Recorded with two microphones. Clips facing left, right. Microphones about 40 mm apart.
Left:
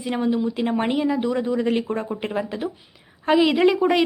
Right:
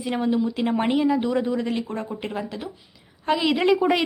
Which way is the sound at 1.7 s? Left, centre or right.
Centre.